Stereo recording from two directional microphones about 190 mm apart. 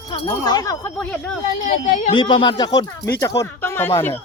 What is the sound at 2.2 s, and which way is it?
Speech, 25° left (ahead or behind).